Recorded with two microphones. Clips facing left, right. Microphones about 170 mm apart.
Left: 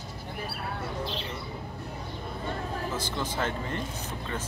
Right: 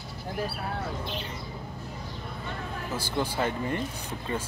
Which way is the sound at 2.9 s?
10° right (ahead or behind).